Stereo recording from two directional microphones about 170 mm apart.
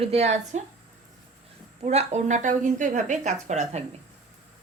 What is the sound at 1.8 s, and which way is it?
Speech, 40° right (ahead or behind).